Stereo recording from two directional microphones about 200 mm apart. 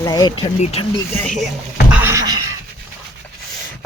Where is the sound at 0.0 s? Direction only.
20° left (ahead or behind).